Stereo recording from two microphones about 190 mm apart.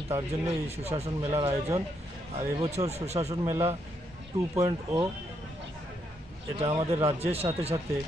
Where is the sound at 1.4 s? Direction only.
15° right (ahead or behind).